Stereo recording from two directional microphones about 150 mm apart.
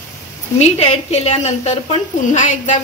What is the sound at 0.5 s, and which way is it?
A woman's voice, 45° left (ahead or behind).